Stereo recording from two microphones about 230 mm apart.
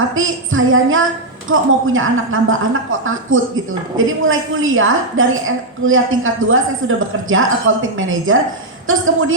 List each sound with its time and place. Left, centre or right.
0.1 s a woman's voice: right